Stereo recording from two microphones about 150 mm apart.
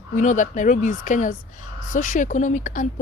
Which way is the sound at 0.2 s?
55° left (ahead or behind).